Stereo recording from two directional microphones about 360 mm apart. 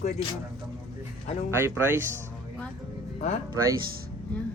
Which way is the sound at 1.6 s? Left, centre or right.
Centre.